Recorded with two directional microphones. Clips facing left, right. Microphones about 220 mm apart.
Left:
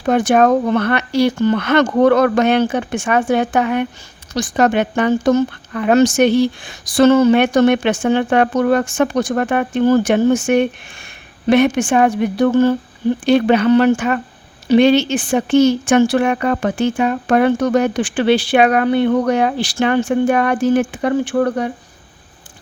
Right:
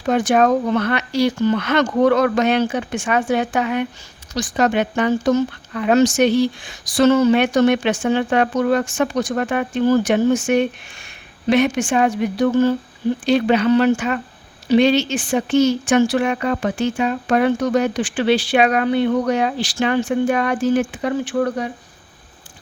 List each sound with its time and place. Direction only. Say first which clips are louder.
0.0 s speech: left 3 dB; 55° left (ahead or behind)